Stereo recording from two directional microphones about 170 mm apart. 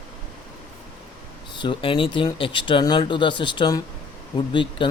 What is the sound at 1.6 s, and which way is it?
A man's voice, 30° left (ahead or behind).